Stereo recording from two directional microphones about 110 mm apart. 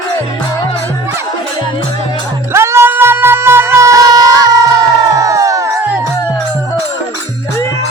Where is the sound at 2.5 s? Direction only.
25° right (ahead or behind).